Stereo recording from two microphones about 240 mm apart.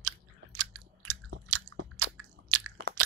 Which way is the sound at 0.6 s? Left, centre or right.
Right.